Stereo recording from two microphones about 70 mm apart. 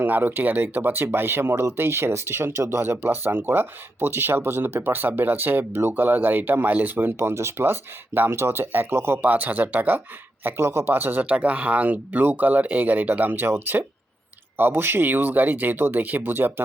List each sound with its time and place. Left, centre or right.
0.0 s speech: right
10.4 s speech: right